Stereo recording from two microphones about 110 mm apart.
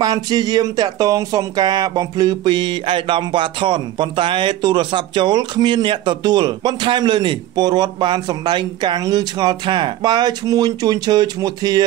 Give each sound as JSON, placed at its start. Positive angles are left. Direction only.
{"t": 0.0, "sound": "speech", "side_deg": -40}